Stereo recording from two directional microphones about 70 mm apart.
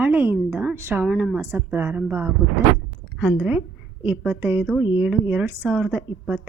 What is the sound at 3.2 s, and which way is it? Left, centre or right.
A woman's voice, centre.